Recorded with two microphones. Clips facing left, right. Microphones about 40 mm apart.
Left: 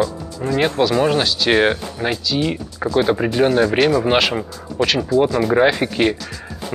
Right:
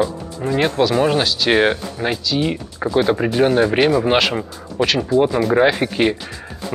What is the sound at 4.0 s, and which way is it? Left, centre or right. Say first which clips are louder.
Speech: even; centre.